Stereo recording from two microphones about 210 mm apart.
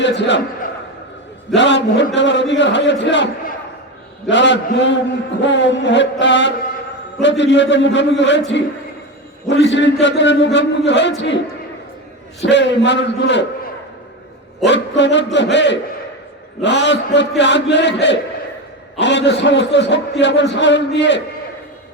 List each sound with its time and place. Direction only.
0.0 s a man's voice: 55° left (ahead or behind)
1.5 s a man's voice: 60° left (ahead or behind)
4.3 s a man's voice: 60° left (ahead or behind)
12.4 s a man's voice: 55° left (ahead or behind)
14.6 s a man's voice: 55° left (ahead or behind)